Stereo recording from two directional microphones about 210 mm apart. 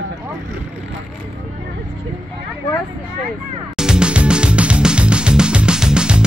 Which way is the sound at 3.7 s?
5° right (ahead or behind).